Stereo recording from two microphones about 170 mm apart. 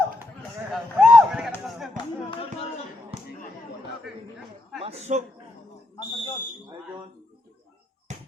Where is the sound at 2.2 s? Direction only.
30° left (ahead or behind).